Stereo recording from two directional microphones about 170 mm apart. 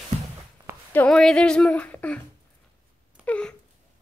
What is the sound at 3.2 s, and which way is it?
Wail, 5° left (ahead or behind).